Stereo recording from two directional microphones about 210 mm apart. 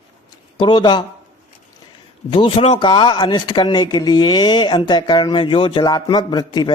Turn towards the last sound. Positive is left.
turn(degrees=20)  # may be behind; listen again after turning